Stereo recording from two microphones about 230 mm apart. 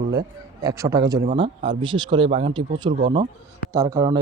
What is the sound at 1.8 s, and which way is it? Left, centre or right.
Speech, centre.